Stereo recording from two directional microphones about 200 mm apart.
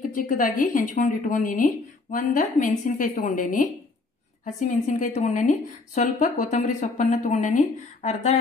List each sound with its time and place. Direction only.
0.1 s speech: 45° left (ahead or behind)